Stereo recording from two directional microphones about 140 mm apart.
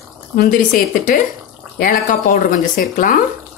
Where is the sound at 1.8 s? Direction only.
70° left (ahead or behind).